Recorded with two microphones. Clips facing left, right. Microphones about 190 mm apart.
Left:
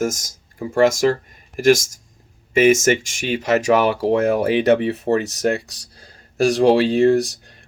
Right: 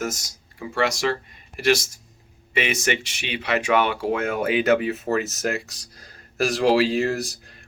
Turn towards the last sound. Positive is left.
turn(degrees=30)  # may be behind; listen again after turning